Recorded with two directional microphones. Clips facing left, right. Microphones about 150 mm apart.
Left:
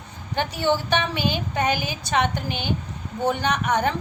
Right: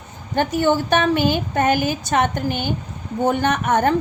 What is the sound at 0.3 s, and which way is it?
A woman's voice, 45° right (ahead or behind).